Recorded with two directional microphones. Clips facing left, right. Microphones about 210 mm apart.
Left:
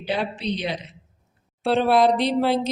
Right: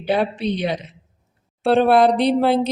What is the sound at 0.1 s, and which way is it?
A man's voice, 55° right (ahead or behind).